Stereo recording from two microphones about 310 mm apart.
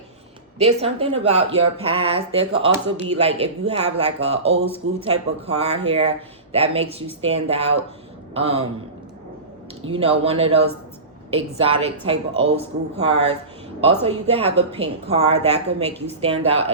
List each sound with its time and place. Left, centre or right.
0.6 s a woman's voice: centre
9.8 s a woman's voice: centre